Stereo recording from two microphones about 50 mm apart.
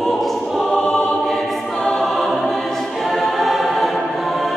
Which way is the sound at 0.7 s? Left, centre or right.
Centre.